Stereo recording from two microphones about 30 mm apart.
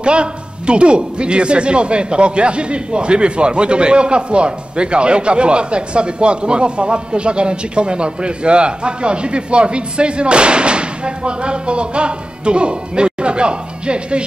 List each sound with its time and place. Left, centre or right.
0.0 s a man's voice: right